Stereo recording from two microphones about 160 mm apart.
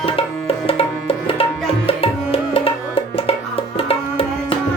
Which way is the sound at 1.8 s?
35° left (ahead or behind).